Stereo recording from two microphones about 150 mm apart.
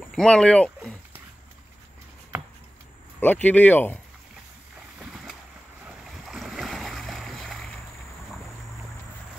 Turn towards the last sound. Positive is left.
turn(degrees=0)  # may be behind; listen again after turning